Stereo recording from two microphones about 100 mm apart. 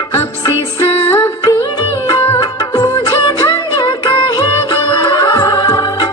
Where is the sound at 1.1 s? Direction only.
20° left (ahead or behind).